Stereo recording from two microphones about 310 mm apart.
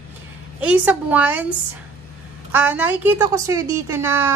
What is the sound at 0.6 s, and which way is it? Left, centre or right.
A woman's voice, centre.